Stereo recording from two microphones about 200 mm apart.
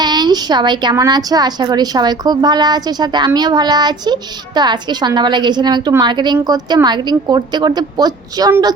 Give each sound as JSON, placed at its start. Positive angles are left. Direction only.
{"t": 0.0, "sound": "a woman's voice", "side_deg": -20}